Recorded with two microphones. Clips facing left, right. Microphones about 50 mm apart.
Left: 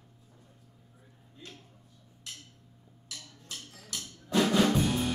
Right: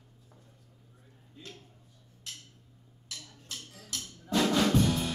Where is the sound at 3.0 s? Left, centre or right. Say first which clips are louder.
Even; centre.